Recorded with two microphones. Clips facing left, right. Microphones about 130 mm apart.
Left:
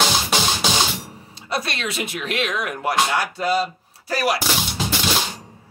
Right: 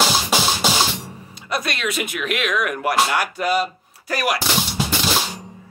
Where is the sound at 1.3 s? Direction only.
30° left (ahead or behind).